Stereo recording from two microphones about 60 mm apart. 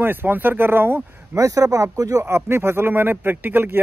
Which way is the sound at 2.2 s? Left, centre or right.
Right.